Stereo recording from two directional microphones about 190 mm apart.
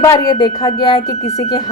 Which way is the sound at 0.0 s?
20° left (ahead or behind).